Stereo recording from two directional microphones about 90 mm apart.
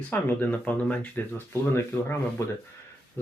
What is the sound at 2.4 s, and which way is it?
Speech, 30° left (ahead or behind).